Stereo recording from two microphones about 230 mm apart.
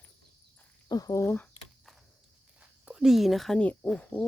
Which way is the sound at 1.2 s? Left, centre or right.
Centre.